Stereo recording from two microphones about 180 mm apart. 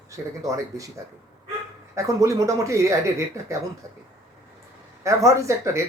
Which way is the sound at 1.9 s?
20° right (ahead or behind).